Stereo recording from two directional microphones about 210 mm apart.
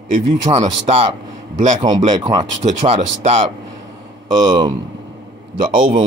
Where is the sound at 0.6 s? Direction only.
30° right (ahead or behind).